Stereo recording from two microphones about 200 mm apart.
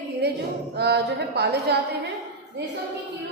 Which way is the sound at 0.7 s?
55° right (ahead or behind).